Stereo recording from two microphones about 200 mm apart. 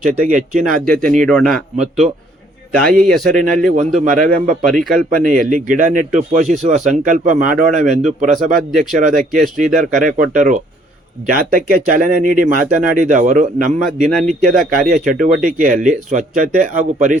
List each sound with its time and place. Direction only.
0.0 s speech: 40° right (ahead or behind)
0.9 s speech: 5° left (ahead or behind)
1.7 s speech: 35° right (ahead or behind)
3.0 s speech: centre (ahead or behind)
3.8 s speech: 40° right (ahead or behind)
4.6 s speech: centre (ahead or behind)
5.2 s speech: 40° right (ahead or behind)
14.4 s speech: centre (ahead or behind)
14.9 s speech: 40° right (ahead or behind)